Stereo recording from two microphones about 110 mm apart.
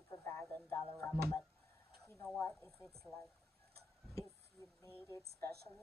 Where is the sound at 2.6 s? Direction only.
5° left (ahead or behind).